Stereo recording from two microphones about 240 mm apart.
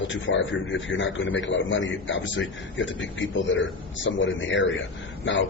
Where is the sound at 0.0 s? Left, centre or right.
Left.